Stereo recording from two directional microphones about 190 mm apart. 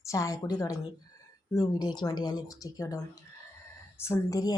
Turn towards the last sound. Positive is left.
turn(degrees=20)  # may be behind; listen again after turning